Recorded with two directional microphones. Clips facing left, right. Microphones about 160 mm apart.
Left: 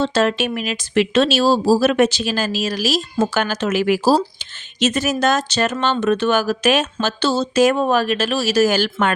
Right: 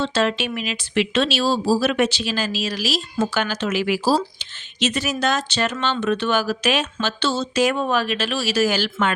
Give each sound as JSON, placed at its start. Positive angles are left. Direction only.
{"t": 0.0, "sound": "speech", "side_deg": 45}